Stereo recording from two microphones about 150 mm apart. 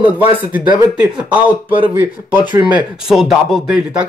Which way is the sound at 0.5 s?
10° right (ahead or behind).